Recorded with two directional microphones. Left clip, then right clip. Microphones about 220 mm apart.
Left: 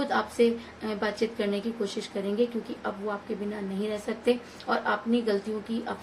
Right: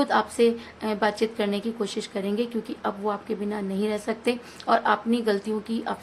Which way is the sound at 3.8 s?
35° right (ahead or behind).